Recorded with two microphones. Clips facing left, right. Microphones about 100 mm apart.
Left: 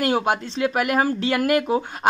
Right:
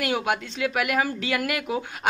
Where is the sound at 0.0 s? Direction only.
35° left (ahead or behind).